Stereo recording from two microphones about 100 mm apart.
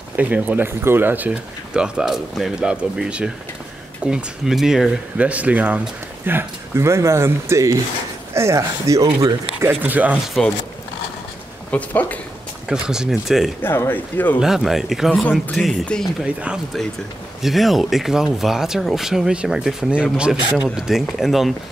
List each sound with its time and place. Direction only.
0.1 s speech: 15° right (ahead or behind)
5.1 s speech: 15° right (ahead or behind); by 9.7 s 35° right (ahead or behind)
9.7 s speech: 20° right (ahead or behind)
10.2 s speech: centre (ahead or behind)
11.7 s speech: 15° left (ahead or behind)
12.6 s speech: 10° right (ahead or behind)
13.6 s speech: 20° left (ahead or behind)
14.4 s speech: 5° right (ahead or behind)
17.4 s speech: centre (ahead or behind)